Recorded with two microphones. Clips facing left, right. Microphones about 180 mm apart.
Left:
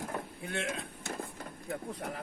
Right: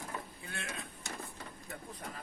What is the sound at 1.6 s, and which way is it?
Vehicle, 60° left (ahead or behind).